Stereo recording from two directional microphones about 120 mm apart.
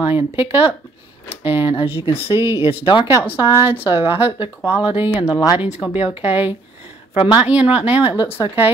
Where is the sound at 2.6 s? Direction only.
40° left (ahead or behind).